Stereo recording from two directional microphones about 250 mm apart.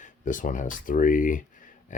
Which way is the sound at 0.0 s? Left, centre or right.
Left.